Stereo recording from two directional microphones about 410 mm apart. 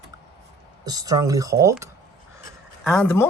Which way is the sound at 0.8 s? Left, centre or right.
Centre.